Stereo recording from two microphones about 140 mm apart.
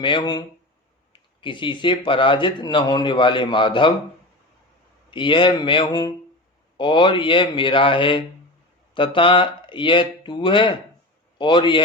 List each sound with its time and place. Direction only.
0.0 s a man's voice: 35° left (ahead or behind)
5.1 s a man's voice: 35° left (ahead or behind)